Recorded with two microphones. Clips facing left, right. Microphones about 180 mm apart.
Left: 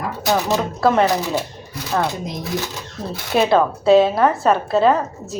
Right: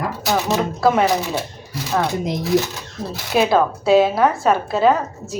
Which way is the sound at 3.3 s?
Centre (ahead or behind).